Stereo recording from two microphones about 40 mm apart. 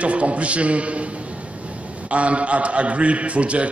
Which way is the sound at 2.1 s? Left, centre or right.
Right.